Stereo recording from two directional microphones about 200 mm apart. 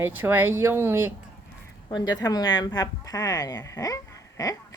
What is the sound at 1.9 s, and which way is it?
Speech, 20° left (ahead or behind).